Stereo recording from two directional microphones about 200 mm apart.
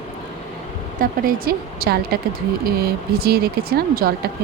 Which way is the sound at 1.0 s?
45° right (ahead or behind).